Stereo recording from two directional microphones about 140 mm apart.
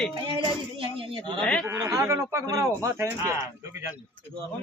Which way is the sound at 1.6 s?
20° right (ahead or behind).